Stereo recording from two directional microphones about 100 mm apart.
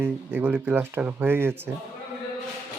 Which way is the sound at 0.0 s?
20° right (ahead or behind).